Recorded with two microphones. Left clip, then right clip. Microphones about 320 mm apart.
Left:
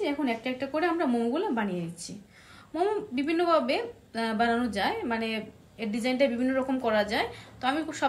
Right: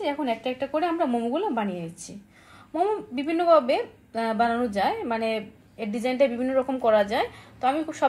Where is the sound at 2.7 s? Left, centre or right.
Centre.